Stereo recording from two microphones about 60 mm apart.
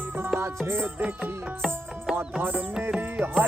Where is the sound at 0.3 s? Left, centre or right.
Right.